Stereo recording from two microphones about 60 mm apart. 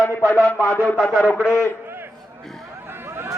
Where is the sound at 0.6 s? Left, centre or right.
Left.